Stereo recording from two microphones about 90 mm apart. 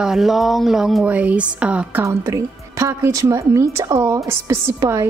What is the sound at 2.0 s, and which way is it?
A woman's voice, 35° right (ahead or behind).